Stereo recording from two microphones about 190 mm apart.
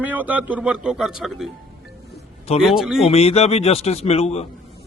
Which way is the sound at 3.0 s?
30° left (ahead or behind).